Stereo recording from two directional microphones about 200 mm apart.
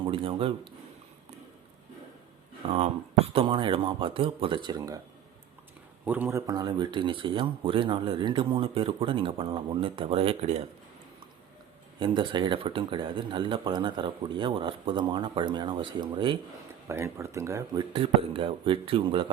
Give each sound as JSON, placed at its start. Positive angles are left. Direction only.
{"t": 0.0, "sound": "speech", "side_deg": -25}
{"t": 2.6, "sound": "speech", "side_deg": -30}
{"t": 6.1, "sound": "speech", "side_deg": -10}
{"t": 11.9, "sound": "speech", "side_deg": -25}
{"t": 17.9, "sound": "speech", "side_deg": -25}